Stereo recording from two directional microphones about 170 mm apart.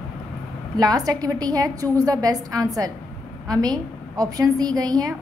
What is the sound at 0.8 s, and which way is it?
A woman's voice, 25° right (ahead or behind).